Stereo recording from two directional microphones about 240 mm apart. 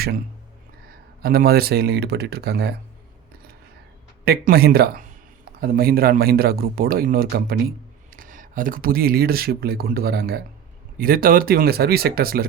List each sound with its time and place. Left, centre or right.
1.2 s speech: right
4.3 s speech: right